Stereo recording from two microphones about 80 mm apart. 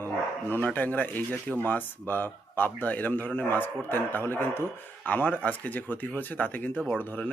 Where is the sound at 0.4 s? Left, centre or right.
Left.